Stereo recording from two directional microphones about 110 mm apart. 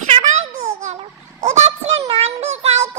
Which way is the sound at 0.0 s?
90° right.